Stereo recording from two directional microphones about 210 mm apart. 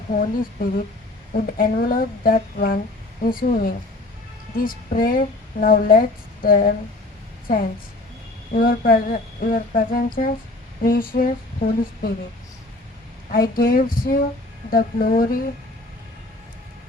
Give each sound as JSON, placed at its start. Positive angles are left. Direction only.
{"t": 0.1, "sound": "music", "side_deg": 40}
{"t": 1.3, "sound": "speech", "side_deg": 40}
{"t": 8.5, "sound": "music", "side_deg": 40}
{"t": 13.3, "sound": "speech", "side_deg": 45}
{"t": 14.7, "sound": "music", "side_deg": 40}